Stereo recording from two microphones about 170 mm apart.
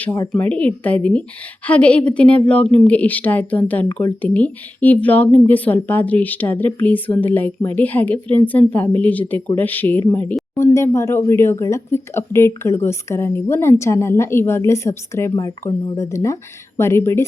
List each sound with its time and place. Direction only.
0.3 s a woman's voice: 10° left (ahead or behind)